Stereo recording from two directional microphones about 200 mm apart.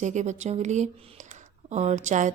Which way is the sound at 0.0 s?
35° right (ahead or behind).